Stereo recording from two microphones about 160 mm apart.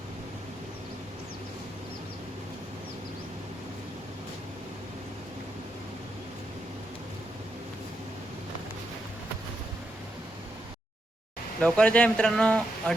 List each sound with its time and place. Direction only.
11.6 s speech: 5° left (ahead or behind)